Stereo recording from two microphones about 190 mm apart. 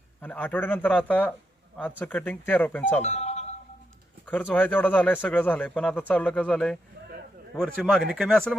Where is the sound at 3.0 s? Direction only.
35° left (ahead or behind).